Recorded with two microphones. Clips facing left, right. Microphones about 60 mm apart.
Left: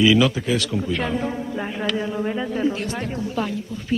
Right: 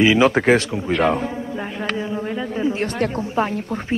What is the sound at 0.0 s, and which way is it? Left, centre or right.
Speech, right.